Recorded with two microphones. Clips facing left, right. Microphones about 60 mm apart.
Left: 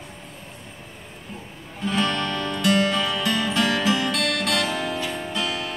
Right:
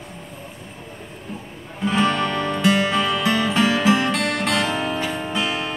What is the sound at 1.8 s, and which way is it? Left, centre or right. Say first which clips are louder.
Music: right 4 dB; right.